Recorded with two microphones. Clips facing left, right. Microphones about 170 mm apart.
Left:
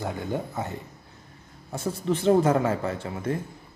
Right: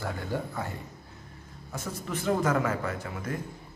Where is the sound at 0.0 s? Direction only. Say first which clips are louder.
Left 3 dB; 20° left (ahead or behind).